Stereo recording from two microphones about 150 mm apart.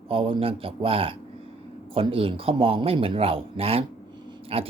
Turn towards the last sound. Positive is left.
turn(degrees=-40)  # may be behind; listen again after turning